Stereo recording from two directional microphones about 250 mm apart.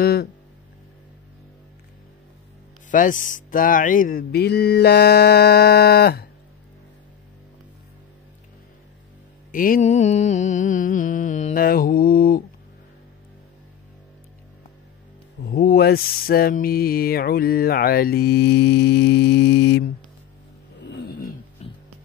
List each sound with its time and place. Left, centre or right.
0.0 s speech: left
2.9 s mantra: left
9.5 s mantra: left
15.4 s mantra: left
20.8 s a sound: left
21.6 s music: left